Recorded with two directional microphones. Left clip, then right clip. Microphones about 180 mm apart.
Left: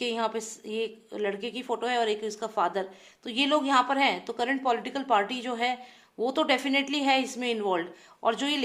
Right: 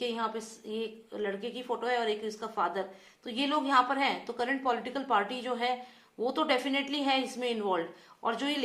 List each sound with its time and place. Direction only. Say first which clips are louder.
0.0 s a woman's voice: left 4 dB; 45° left (ahead or behind)